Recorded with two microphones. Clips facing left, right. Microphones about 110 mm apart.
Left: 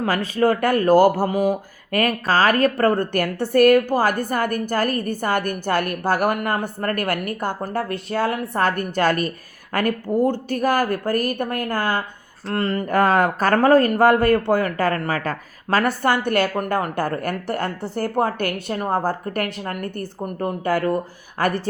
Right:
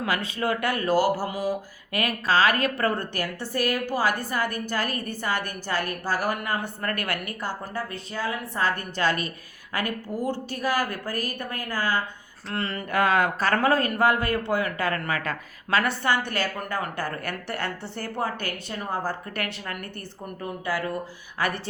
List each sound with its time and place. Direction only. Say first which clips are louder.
0.0 s speech: left 8 dB; 40° left (ahead or behind)
12.5 s speech: left 8 dB; 40° left (ahead or behind)
16.0 s speech: left 6 dB; 50° left (ahead or behind)
17.1 s speech: left 7 dB; 40° left (ahead or behind)